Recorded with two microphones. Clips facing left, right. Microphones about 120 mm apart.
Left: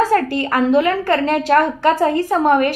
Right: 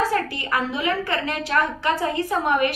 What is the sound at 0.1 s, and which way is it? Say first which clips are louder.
A woman's voice: left 7 dB; 55° left (ahead or behind).